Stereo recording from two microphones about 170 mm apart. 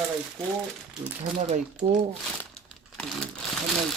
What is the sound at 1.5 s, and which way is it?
Speech, 40° right (ahead or behind).